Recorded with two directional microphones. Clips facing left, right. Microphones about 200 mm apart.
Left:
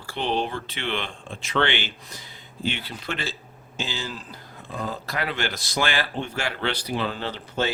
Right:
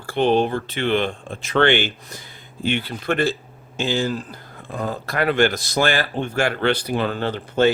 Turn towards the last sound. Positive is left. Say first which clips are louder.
# right 9 dB
turn(degrees=-55)  # may be behind; listen again after turning